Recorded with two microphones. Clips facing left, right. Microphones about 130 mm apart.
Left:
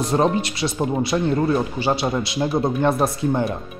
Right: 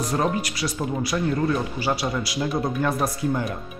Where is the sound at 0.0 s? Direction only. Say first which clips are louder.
Left 5 dB; 25° left (ahead or behind).